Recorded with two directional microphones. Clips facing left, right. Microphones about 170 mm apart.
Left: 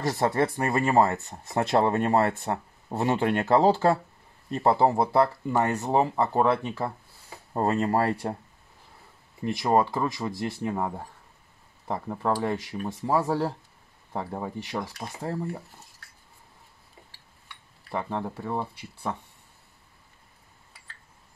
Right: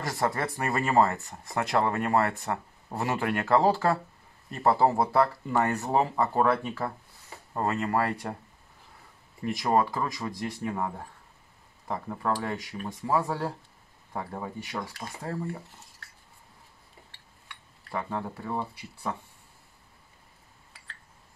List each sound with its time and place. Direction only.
0.0 s speech: 25° left (ahead or behind)
7.5 s speech: 35° left (ahead or behind)
9.6 s speech: 20° left (ahead or behind)
12.2 s speech: 25° left (ahead or behind)
17.9 s speech: 25° left (ahead or behind)